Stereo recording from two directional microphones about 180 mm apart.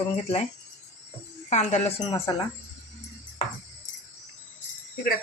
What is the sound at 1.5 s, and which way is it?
Speech, 40° left (ahead or behind).